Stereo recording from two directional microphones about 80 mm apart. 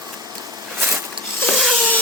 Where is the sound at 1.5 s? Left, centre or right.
Centre.